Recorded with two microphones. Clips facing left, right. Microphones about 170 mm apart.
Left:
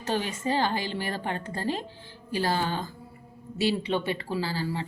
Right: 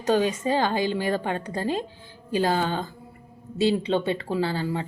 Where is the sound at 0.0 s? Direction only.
15° right (ahead or behind).